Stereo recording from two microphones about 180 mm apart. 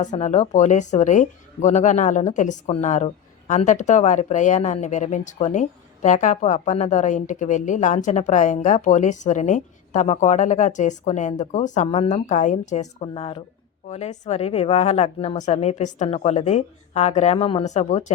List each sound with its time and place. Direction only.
0.0 s a woman's voice: 40° left (ahead or behind)